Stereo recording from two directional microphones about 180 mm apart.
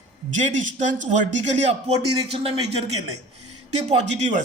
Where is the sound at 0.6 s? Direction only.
40° right (ahead or behind).